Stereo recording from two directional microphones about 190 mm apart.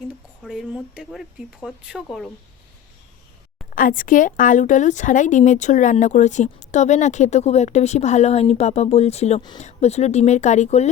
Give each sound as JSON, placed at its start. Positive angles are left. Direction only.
{"t": 0.4, "sound": "speech", "side_deg": -5}
{"t": 3.8, "sound": "a woman's voice", "side_deg": 45}